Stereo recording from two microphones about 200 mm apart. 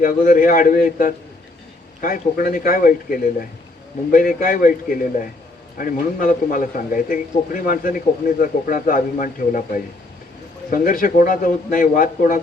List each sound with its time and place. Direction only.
0.0 s a man's voice: 40° left (ahead or behind)